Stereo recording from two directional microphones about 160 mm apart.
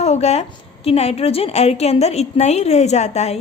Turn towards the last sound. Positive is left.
turn(degrees=45)  # may be behind; listen again after turning